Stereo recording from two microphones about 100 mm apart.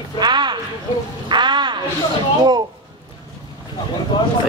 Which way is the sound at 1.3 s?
50° right (ahead or behind).